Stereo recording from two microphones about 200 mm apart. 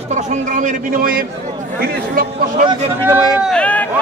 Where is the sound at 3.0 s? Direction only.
10° right (ahead or behind).